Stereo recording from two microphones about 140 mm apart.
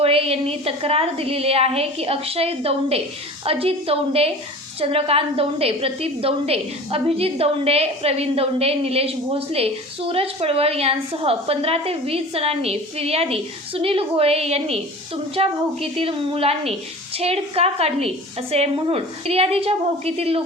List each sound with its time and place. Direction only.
0.0 s a woman's voice: 45° right (ahead or behind)